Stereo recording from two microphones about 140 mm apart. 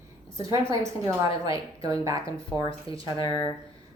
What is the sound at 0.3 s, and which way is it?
Speech, 20° right (ahead or behind).